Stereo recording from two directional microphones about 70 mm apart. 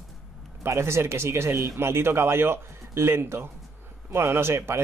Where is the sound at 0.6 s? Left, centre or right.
Right.